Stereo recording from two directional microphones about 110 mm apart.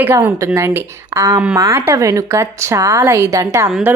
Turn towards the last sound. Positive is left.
turn(degrees=-30)  # may be behind; listen again after turning